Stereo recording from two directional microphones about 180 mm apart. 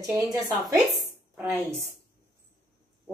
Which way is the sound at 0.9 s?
10° right (ahead or behind).